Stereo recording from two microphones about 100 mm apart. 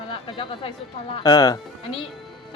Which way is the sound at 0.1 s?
65° left (ahead or behind).